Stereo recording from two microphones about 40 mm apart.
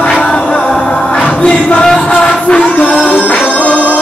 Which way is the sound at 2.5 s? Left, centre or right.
Left.